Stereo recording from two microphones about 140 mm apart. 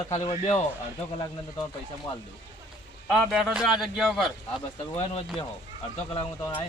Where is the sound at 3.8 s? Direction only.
Centre (ahead or behind).